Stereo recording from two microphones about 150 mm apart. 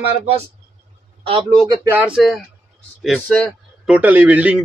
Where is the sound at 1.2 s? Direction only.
35° right (ahead or behind).